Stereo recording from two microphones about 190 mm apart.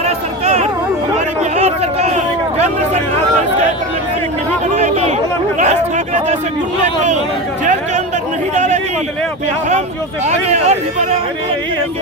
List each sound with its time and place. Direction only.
0.0 s a sound: 35° right (ahead or behind)
1.5 s chatter: 35° right (ahead or behind)
4.7 s chatter: 35° right (ahead or behind)
6.8 s speech: 40° right (ahead or behind)
7.6 s chatter: 40° right (ahead or behind)
10.2 s speech: 35° right (ahead or behind)